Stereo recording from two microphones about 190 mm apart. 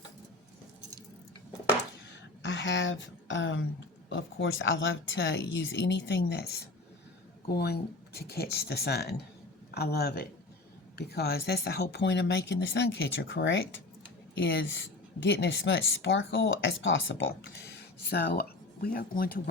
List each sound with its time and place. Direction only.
2.4 s a sound: 70° left (ahead or behind)
4.1 s speech: 85° left; by 13.7 s 70° left (ahead or behind)
15.2 s speech: 65° left (ahead or behind)
18.1 s speech: 55° left (ahead or behind)